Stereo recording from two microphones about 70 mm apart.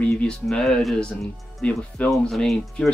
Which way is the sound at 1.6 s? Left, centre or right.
Centre.